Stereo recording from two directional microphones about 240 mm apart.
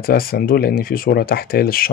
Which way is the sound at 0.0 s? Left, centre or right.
Left.